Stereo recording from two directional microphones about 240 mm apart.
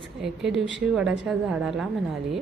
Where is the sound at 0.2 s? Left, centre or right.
Centre.